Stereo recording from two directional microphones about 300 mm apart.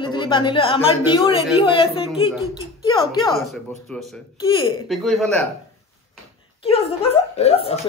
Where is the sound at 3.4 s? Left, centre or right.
Centre.